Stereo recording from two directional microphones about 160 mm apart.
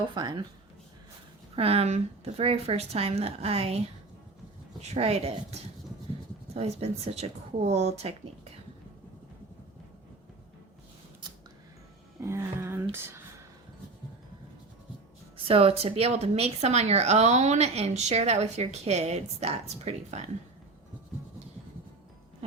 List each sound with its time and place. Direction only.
0.0 s speech: 30° right (ahead or behind)
1.5 s speech: 40° right (ahead or behind)
12.2 s speech: 15° right (ahead or behind)
15.4 s speech: 35° right (ahead or behind)